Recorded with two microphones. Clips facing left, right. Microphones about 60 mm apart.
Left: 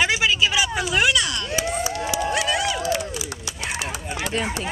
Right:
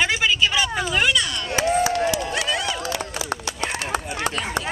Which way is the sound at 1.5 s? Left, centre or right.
Right.